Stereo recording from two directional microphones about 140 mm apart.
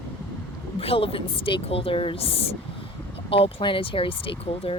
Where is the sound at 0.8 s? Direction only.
45° left (ahead or behind).